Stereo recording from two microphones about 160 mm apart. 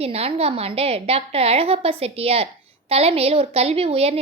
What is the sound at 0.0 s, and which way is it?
A woman's voice, 40° right (ahead or behind).